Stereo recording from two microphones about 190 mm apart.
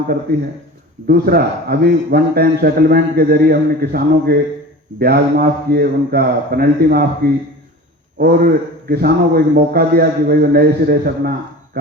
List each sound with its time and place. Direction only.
1.0 s a man's voice: 55° right (ahead or behind)